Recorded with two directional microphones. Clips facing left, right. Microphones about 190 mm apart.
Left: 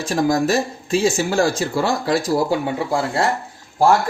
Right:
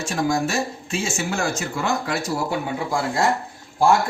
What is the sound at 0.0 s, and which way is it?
Speech, 35° left (ahead or behind).